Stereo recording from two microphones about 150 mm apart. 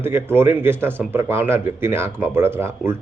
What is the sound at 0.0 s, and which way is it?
A man's voice, 15° right (ahead or behind).